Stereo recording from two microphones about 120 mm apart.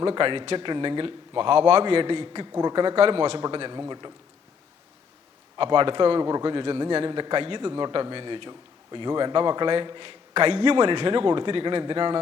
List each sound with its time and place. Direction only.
0.0 s a man's voice: 40° right (ahead or behind)
5.5 s a man's voice: 45° right (ahead or behind)